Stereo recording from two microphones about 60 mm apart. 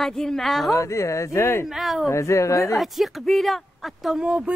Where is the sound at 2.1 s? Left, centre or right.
Left.